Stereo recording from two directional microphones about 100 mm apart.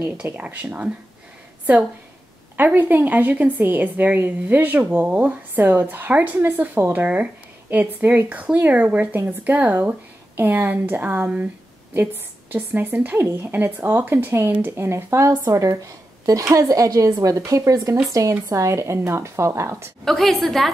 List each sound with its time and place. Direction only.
0.0 s a woman's voice: 15° right (ahead or behind)
2.5 s a woman's voice: 20° right (ahead or behind)
20.1 s a woman's voice: centre (ahead or behind)